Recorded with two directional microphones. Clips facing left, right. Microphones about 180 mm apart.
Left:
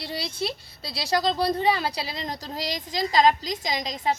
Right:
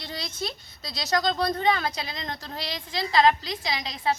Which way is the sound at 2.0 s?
35° left (ahead or behind).